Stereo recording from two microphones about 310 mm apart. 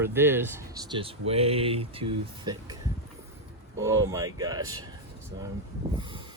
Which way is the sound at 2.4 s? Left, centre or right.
Centre.